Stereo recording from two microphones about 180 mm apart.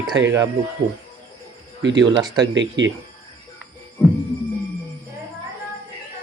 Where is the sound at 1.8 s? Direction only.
80° right.